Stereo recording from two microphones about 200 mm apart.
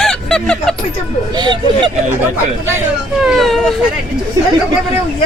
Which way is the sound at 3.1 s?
Centre (ahead or behind).